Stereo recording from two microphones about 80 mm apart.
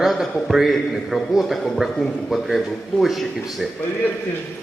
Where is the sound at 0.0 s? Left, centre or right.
Centre.